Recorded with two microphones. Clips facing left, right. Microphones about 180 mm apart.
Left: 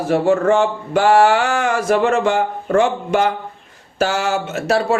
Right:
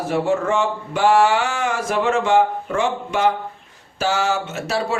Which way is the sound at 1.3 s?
55° left (ahead or behind).